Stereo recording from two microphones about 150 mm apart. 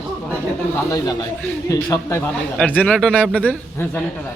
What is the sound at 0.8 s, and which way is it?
Speech, 25° left (ahead or behind).